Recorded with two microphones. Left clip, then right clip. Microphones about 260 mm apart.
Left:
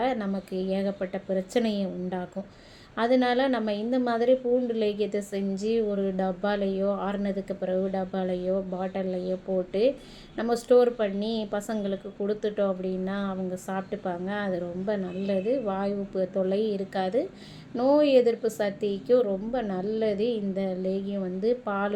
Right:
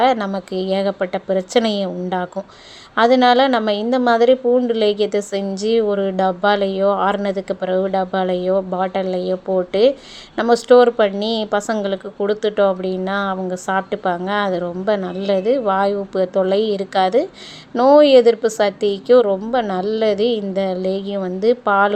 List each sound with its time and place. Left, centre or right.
0.0 s a woman's voice: right